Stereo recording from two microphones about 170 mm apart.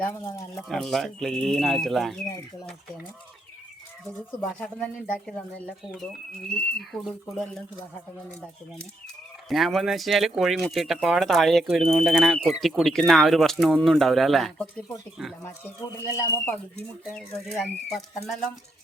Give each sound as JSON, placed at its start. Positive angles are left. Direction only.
{"t": 0.0, "sound": "speech", "side_deg": 20}
{"t": 0.5, "sound": "speech", "side_deg": 0}
{"t": 4.0, "sound": "speech", "side_deg": 10}
{"t": 6.7, "sound": "speech", "side_deg": 0}
{"t": 9.5, "sound": "speech", "side_deg": 0}
{"t": 16.1, "sound": "speech", "side_deg": 15}
{"t": 17.2, "sound": "speech", "side_deg": 5}